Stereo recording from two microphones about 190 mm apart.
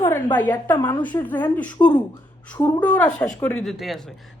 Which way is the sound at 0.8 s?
20° left (ahead or behind).